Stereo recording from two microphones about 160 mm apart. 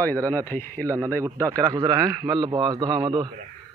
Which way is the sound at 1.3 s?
20° right (ahead or behind).